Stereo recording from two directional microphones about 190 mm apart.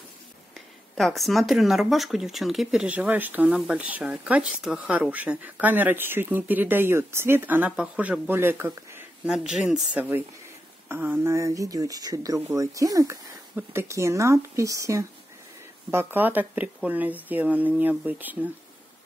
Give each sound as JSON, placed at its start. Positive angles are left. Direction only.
{"t": 0.6, "sound": "speech", "side_deg": 0}